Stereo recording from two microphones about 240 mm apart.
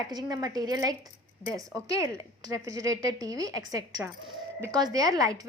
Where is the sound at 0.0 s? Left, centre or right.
Centre.